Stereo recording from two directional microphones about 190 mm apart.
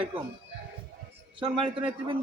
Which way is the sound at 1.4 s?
25° right (ahead or behind).